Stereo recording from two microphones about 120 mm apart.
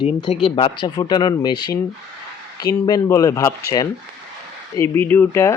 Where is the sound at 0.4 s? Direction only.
45° left (ahead or behind).